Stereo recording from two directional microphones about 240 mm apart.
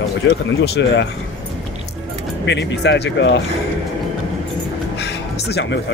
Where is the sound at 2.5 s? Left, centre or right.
Left.